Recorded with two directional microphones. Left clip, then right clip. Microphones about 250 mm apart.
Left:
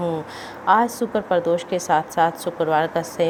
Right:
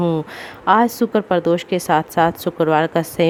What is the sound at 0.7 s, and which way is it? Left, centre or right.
Speech, right.